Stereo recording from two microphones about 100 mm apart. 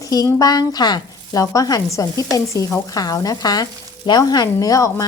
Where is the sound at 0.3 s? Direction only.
40° left (ahead or behind).